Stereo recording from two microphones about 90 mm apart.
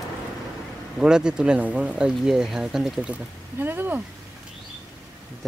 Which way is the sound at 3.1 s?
20° right (ahead or behind).